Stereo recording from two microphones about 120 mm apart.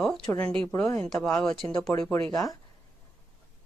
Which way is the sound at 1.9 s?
20° left (ahead or behind).